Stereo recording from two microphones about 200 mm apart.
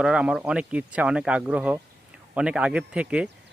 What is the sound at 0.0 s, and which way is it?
Speech, 5° right (ahead or behind).